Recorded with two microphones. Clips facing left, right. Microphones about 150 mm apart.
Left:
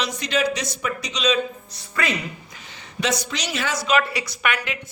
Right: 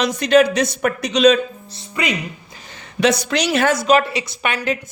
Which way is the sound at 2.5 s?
35° right (ahead or behind).